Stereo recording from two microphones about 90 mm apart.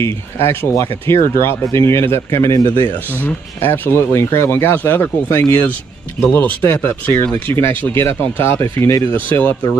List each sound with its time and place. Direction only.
0.0 s speech: 30° left (ahead or behind)